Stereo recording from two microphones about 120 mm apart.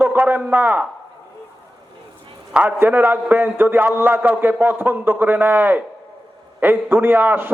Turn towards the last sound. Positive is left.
turn(degrees=-15)  # may be behind; listen again after turning